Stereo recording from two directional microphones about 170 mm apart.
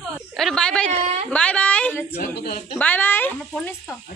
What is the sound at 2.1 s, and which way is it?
Speech, 65° left (ahead or behind).